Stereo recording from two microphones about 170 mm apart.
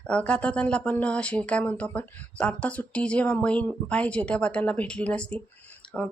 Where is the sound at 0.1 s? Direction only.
5° left (ahead or behind).